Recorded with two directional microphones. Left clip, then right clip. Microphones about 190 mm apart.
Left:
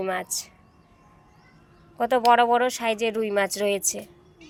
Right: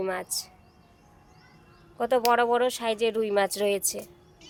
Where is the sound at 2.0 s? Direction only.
5° left (ahead or behind).